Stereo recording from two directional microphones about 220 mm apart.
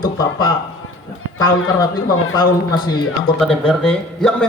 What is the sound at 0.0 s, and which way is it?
A man's voice, 20° left (ahead or behind).